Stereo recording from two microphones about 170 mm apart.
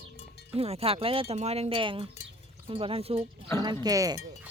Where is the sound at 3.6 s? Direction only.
25° right (ahead or behind).